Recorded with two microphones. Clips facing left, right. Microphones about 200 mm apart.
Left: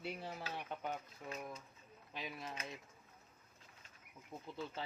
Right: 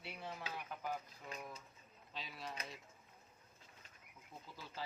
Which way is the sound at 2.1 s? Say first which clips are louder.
Left 2 dB; 20° left (ahead or behind).